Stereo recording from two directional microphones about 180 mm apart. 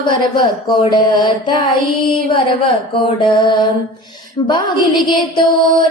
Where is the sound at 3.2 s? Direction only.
25° left (ahead or behind).